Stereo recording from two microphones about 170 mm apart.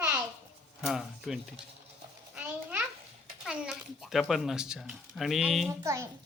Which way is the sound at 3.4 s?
5° right (ahead or behind).